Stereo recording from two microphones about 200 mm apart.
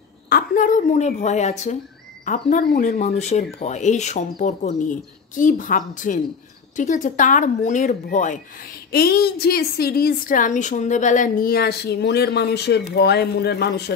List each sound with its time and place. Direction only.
0.3 s speech: 40° left (ahead or behind)
8.9 s a woman's voice: 50° left (ahead or behind)